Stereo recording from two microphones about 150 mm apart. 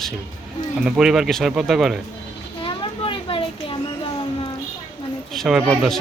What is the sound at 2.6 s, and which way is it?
Children playing, 35° left (ahead or behind).